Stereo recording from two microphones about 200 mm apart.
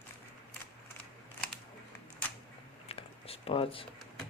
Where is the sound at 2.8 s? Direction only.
30° left (ahead or behind).